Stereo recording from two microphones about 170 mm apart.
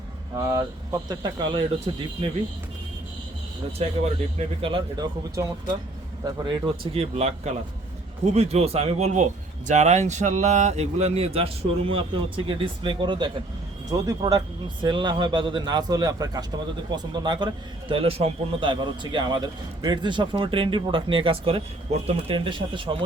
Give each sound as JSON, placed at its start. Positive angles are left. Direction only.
{"t": 0.3, "sound": "a man's voice", "side_deg": -20}
{"t": 3.8, "sound": "a man's voice", "side_deg": -35}